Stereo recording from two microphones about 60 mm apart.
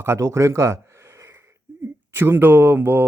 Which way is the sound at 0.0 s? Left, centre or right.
Right.